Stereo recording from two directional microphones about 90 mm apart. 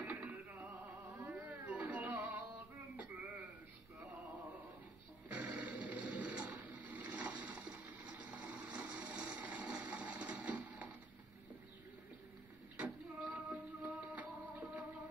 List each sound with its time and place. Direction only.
0.0 s music: 20° right (ahead or behind)
1.3 s a sound: 15° right (ahead or behind)
1.7 s music: 15° right (ahead or behind)
5.3 s music: 15° right (ahead or behind)
6.8 s a sound: 15° right (ahead or behind)
12.7 s music: 15° right (ahead or behind)